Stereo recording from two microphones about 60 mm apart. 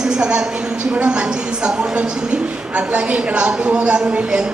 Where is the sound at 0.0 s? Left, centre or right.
Centre.